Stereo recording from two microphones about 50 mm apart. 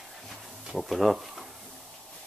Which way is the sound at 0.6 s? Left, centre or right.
Centre.